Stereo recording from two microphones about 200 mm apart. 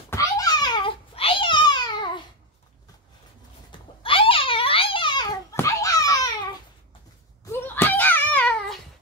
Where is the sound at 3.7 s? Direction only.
25° left (ahead or behind).